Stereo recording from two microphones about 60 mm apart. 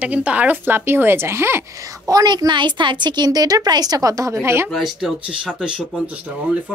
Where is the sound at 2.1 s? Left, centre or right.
Right.